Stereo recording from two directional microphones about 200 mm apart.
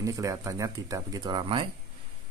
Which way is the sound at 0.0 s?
15° right (ahead or behind).